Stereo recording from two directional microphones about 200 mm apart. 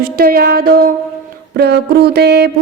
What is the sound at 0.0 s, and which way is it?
Music, 50° right (ahead or behind).